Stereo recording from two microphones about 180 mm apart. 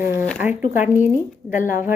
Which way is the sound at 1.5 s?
50° left (ahead or behind).